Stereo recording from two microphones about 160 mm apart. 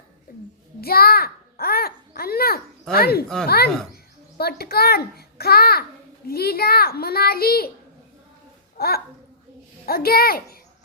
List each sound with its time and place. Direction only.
0.8 s a child's voice: 70° left (ahead or behind)
8.8 s a child's voice: 75° left (ahead or behind)